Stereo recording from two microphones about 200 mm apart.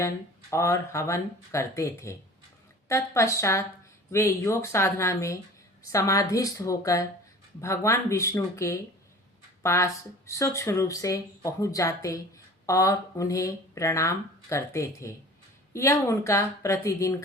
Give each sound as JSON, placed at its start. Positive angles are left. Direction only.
{"t": 0.5, "sound": "speech", "side_deg": 15}